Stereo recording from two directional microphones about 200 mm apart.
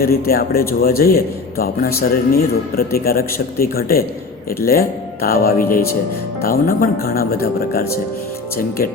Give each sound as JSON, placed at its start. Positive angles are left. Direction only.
{"t": 0.0, "sound": "a man's voice", "side_deg": 50}